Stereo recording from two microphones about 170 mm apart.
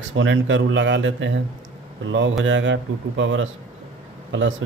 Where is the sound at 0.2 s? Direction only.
90° right.